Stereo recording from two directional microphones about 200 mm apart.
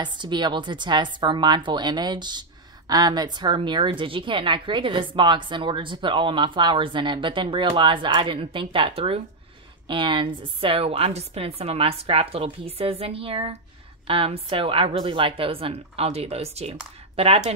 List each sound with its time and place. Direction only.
0.0 s speech: 25° right (ahead or behind)